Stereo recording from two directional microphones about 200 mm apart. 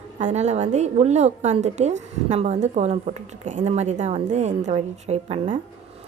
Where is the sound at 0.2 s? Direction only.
35° right (ahead or behind).